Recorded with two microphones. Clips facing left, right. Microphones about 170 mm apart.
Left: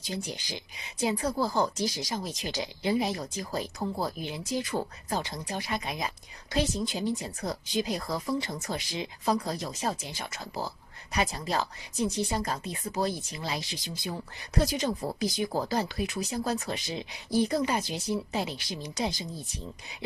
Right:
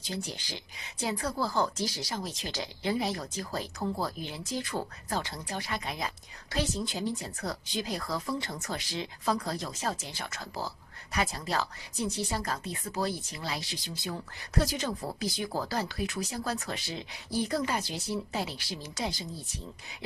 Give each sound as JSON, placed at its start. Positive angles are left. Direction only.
{"t": 0.0, "sound": "speech", "side_deg": 15}